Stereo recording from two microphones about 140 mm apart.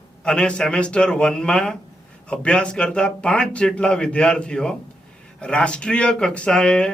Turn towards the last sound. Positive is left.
turn(degrees=5)  # may be behind; listen again after turning